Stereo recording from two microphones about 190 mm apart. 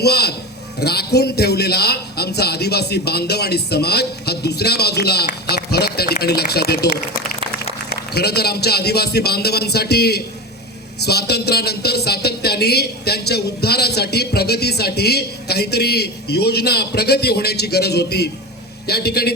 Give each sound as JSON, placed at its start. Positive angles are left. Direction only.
{"t": 0.0, "sound": "speech", "side_deg": 60}
{"t": 7.9, "sound": "speech", "side_deg": 55}